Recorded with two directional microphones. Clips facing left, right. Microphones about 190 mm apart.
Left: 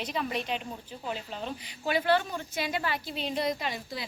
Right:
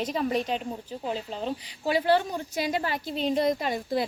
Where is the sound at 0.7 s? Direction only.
30° right (ahead or behind); by 4.0 s 50° right (ahead or behind).